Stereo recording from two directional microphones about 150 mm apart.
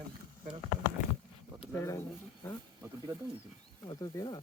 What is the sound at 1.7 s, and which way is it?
Speech, 20° left (ahead or behind).